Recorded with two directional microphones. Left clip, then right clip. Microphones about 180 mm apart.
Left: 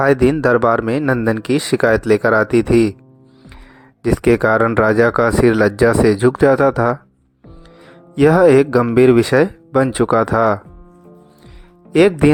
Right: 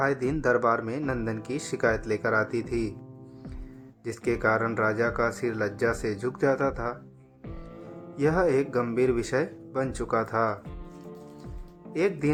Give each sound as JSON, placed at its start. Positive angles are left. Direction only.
{"t": 0.0, "sound": "speech", "side_deg": 50}
{"t": 4.0, "sound": "speech", "side_deg": 50}
{"t": 8.1, "sound": "speech", "side_deg": 50}
{"t": 11.9, "sound": "speech", "side_deg": 55}